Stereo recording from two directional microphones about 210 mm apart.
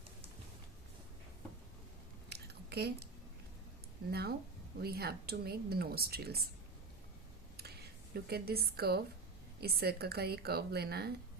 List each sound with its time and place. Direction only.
2.3 s a sound: 50° right (ahead or behind)
4.1 s speech: 50° right (ahead or behind)
8.1 s speech: 50° right (ahead or behind)